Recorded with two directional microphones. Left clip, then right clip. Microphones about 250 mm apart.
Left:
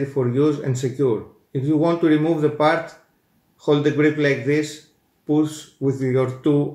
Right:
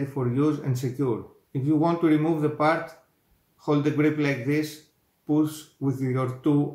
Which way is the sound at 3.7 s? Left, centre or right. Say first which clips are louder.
Left 6 dB; centre.